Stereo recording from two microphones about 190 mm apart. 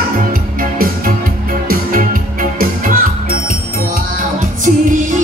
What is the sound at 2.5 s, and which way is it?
Music, 50° right (ahead or behind).